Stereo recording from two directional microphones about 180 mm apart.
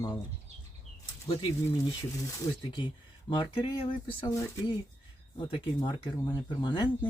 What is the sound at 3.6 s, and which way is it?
Speech, 30° left (ahead or behind).